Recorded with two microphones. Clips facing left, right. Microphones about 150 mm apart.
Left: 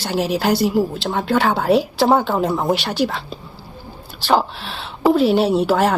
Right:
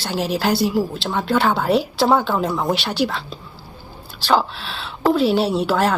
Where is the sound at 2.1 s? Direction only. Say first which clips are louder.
Left 2 dB; 10° left (ahead or behind).